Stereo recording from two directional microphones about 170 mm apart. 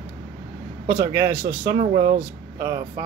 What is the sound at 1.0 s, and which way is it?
Speech, 20° right (ahead or behind).